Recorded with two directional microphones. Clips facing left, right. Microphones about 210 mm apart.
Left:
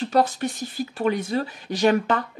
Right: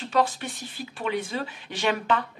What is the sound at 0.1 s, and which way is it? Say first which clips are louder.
Speech: left 2 dB; 40° left (ahead or behind).